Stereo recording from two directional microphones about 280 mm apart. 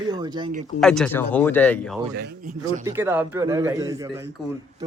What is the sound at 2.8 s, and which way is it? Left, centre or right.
A man's voice, centre.